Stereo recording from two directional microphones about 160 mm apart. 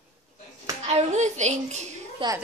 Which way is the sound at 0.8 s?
45° right (ahead or behind).